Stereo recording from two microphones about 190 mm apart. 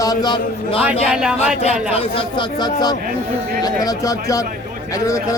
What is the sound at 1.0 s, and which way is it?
Speech, 5° right (ahead or behind).